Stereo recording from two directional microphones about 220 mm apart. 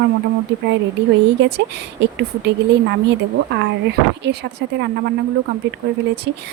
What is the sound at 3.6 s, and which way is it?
Speech, 50° right (ahead or behind).